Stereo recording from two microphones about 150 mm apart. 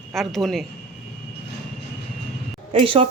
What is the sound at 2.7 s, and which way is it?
Speech, 40° right (ahead or behind).